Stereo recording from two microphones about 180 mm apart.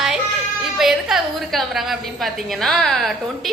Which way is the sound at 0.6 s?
Centre (ahead or behind).